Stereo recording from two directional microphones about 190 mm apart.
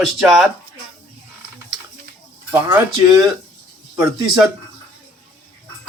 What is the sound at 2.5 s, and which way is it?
Speech, 20° right (ahead or behind).